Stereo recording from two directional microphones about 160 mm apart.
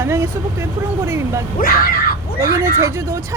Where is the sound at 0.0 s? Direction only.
20° right (ahead or behind).